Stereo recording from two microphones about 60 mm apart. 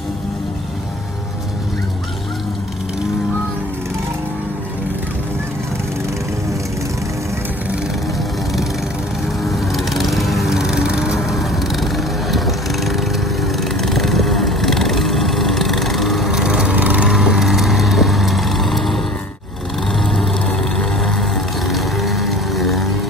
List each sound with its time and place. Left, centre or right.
9.4 s lawn mower: centre
11.2 s vehicle: centre
16.7 s vehicle: right
17.0 s vehicle: centre
20.4 s a sound: centre